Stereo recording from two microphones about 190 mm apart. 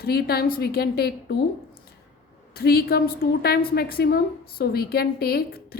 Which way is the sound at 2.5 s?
55° left (ahead or behind).